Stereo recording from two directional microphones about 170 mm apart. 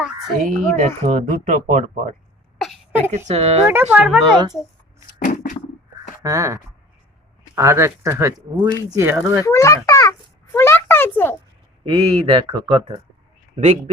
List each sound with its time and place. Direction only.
0.4 s speech: 50° right (ahead or behind)
3.2 s speech: 40° right (ahead or behind)
3.7 s speech: 10° right (ahead or behind)
4.2 s speech: 25° right (ahead or behind)
5.2 s a sound: 50° left (ahead or behind)
6.2 s speech: 20° right (ahead or behind)
9.4 s a child's voice: 20° left (ahead or behind)
11.9 s speech: 30° right (ahead or behind)
13.6 s speech: 45° right (ahead or behind)